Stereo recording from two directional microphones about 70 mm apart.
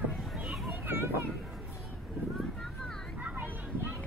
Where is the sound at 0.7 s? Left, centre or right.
Right.